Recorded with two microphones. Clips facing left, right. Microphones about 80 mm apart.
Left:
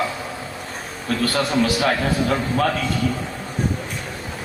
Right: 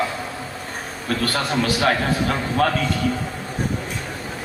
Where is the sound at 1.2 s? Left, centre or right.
Right.